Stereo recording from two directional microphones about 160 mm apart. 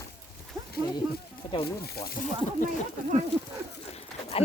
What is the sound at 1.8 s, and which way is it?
Speech, 75° left (ahead or behind).